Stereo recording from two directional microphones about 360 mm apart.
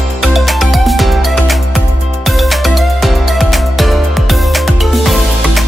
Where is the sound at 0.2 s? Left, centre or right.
Centre.